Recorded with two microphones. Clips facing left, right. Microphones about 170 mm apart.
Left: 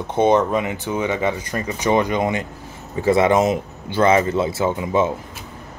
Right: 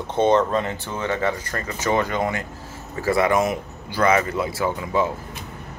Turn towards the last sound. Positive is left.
turn(degrees=20)  # may be behind; listen again after turning